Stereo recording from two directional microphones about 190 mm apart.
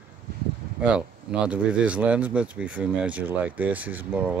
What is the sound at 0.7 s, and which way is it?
Speech, 5° right (ahead or behind).